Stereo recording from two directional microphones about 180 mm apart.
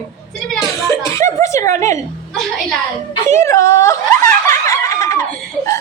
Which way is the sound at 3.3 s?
15° left (ahead or behind).